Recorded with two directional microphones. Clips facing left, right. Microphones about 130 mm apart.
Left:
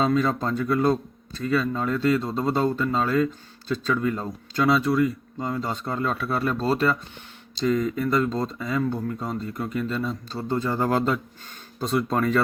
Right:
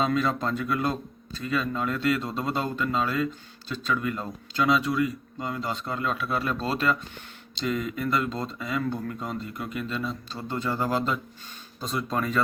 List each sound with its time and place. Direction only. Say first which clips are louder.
0.0 s speech: left 3 dB; 35° left (ahead or behind)
10.8 s speech: left 3 dB; 55° left (ahead or behind)